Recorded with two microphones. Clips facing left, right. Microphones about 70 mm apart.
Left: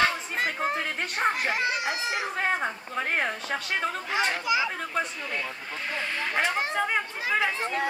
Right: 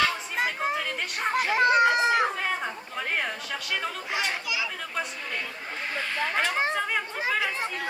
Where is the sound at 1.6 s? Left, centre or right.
Right.